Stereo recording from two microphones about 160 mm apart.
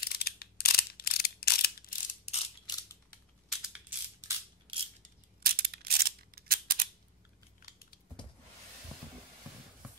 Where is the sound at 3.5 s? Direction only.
5° right (ahead or behind).